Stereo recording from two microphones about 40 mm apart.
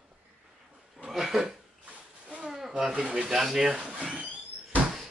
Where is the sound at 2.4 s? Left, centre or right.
Centre.